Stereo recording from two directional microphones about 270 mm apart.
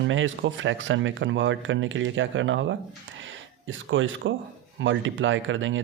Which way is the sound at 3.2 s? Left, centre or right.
Right.